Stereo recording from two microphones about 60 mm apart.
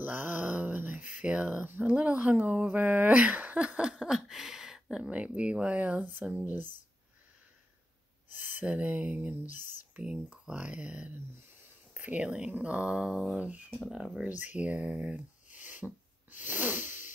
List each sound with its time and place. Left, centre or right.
0.0 s a sound: right
1.2 s speech: centre
1.6 s speech: right
2.0 s speech: right
5.9 s speech: right
8.3 s a sound: right
8.6 s speech: right
10.4 s speech: centre
13.3 s speech: right
13.8 s speech: centre
14.2 s speech: right
14.6 s a sound: centre; by 17.1 s right